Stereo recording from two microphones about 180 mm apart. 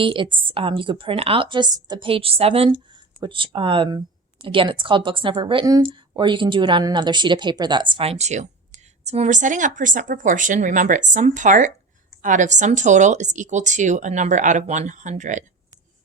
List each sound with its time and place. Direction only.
0.0 s a woman's voice: 30° right (ahead or behind)